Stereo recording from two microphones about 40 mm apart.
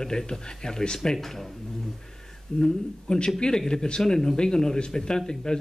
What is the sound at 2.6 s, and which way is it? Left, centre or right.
Speech, centre.